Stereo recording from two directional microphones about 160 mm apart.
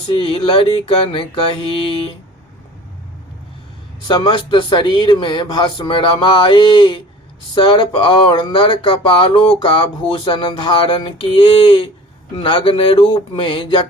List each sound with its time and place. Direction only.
0.2 s speech: 35° left (ahead or behind)
4.1 s speech: 25° left (ahead or behind)